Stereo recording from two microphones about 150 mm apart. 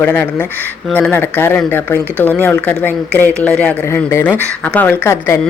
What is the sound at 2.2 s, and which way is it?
Speech, 10° left (ahead or behind).